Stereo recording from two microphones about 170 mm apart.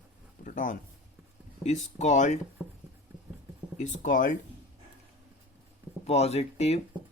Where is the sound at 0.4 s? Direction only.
50° left (ahead or behind).